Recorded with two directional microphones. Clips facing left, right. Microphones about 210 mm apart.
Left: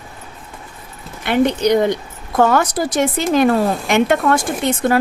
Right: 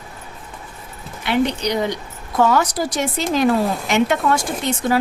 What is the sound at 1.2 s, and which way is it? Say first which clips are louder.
A woman's voice: left 4 dB; 50° left (ahead or behind).